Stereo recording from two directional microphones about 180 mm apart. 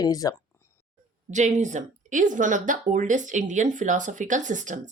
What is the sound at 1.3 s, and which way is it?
Speech, 40° right (ahead or behind).